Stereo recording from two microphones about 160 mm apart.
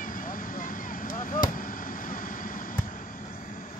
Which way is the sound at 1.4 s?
60° left (ahead or behind).